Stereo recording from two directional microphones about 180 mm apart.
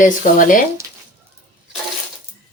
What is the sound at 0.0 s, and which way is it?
Speech, 45° left (ahead or behind).